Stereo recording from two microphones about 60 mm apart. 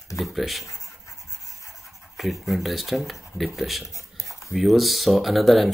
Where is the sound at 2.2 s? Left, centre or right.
Centre.